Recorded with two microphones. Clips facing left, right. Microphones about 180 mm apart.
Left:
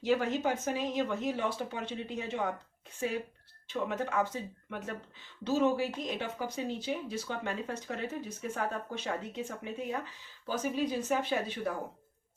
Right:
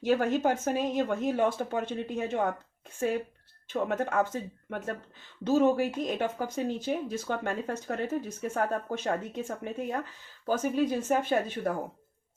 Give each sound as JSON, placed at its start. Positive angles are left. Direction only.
{"t": 0.0, "sound": "speech", "side_deg": -50}
{"t": 3.7, "sound": "speech", "side_deg": -50}